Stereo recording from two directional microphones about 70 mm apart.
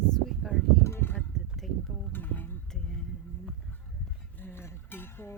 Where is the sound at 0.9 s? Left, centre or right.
Left.